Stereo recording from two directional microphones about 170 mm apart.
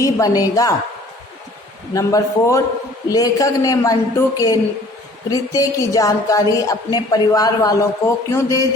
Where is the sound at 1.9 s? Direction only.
20° left (ahead or behind).